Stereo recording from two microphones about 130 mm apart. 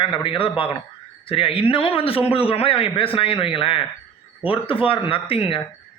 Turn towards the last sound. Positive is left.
turn(degrees=45)  # may be behind; listen again after turning